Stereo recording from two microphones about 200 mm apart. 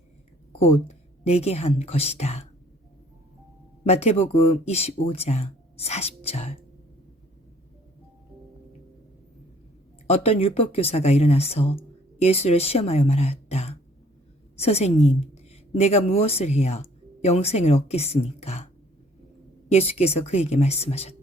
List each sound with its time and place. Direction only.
0.6 s a woman's voice: 30° left (ahead or behind)
3.8 s speech: 30° left (ahead or behind)
10.1 s a woman's voice: 30° left (ahead or behind)